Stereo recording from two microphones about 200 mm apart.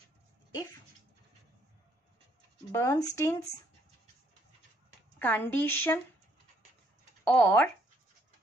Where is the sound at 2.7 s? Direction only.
15° left (ahead or behind).